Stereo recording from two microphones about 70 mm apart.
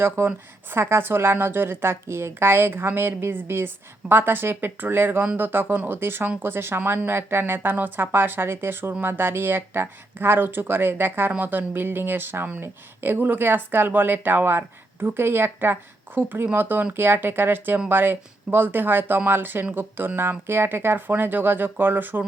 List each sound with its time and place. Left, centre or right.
0.0 s speech: right